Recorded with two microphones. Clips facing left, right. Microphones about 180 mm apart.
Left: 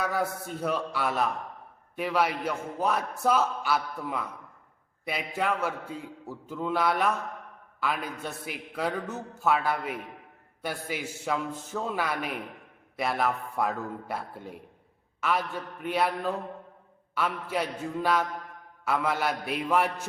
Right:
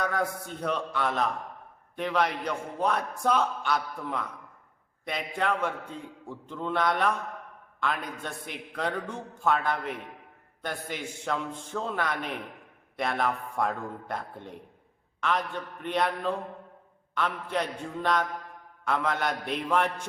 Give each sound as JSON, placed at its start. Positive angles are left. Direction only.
{"t": 0.0, "sound": "a man's voice", "side_deg": 5}